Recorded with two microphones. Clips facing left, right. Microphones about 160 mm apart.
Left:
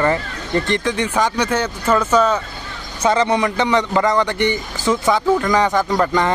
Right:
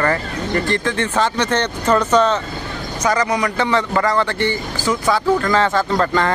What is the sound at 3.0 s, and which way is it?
A man's voice, 25° left (ahead or behind).